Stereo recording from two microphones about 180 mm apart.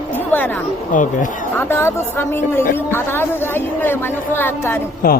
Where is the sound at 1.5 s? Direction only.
10° left (ahead or behind).